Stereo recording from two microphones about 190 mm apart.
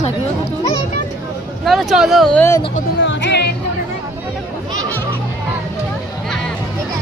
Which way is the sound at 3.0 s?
65° left (ahead or behind).